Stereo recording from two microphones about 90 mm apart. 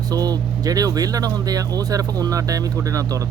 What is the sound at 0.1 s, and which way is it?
Speech, 45° right (ahead or behind).